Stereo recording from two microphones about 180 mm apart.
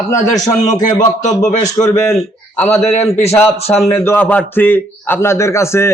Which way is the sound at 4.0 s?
10° left (ahead or behind).